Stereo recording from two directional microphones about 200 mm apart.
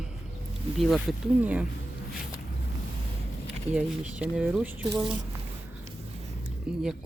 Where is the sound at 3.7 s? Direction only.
5° right (ahead or behind).